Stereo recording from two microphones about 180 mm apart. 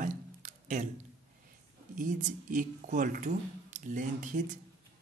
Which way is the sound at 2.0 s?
45° right (ahead or behind).